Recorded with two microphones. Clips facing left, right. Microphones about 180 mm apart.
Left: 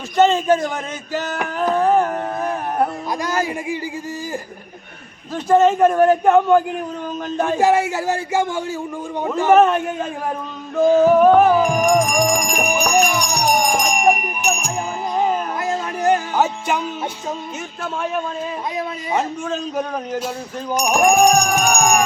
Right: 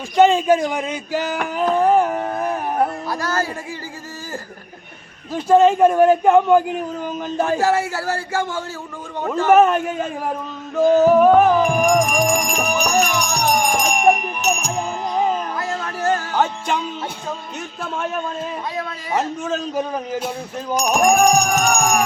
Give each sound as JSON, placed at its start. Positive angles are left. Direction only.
{"t": 0.2, "sound": "a man's voice", "side_deg": -10}
{"t": 1.7, "sound": "a sound", "side_deg": -10}
{"t": 3.1, "sound": "a man's voice", "side_deg": 15}
{"t": 5.3, "sound": "a man's voice", "side_deg": -10}
{"t": 7.3, "sound": "music", "side_deg": -5}
{"t": 7.6, "sound": "a man's voice", "side_deg": 15}
{"t": 9.6, "sound": "music", "side_deg": -5}
{"t": 12.5, "sound": "a man's voice", "side_deg": 10}
{"t": 13.1, "sound": "music", "side_deg": 10}
{"t": 15.6, "sound": "a sound", "side_deg": 20}
{"t": 16.4, "sound": "a man's voice", "side_deg": 5}
{"t": 19.1, "sound": "music", "side_deg": 0}
{"t": 20.7, "sound": "a man's voice", "side_deg": 10}